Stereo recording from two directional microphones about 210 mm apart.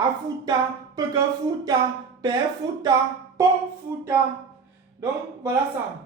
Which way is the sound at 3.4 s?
15° right (ahead or behind).